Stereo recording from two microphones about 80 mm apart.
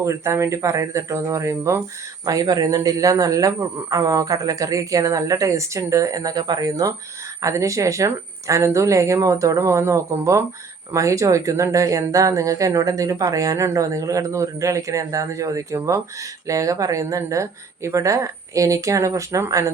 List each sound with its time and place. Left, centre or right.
0.0 s speech: right
2.2 s a man's voice: right